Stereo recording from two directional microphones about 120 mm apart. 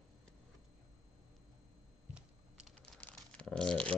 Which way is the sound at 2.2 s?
5° right (ahead or behind).